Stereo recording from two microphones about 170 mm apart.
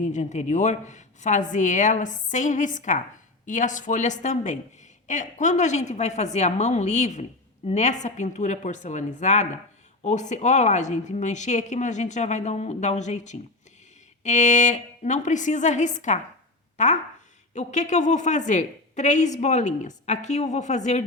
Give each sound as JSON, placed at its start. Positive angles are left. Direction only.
{"t": 0.0, "sound": "a woman's voice", "side_deg": 45}